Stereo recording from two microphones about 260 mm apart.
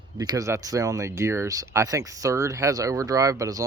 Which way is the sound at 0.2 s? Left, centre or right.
Centre.